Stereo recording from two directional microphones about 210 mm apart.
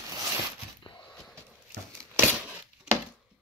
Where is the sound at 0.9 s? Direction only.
5° left (ahead or behind).